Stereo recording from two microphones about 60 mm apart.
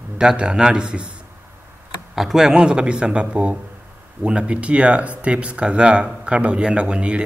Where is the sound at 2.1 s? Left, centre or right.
Centre.